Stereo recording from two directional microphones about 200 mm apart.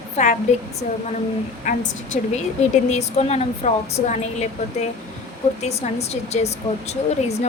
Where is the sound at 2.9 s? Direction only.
35° left (ahead or behind).